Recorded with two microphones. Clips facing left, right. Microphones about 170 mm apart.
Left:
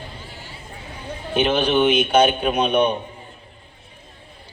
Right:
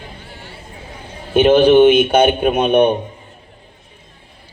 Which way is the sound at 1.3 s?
55° right (ahead or behind).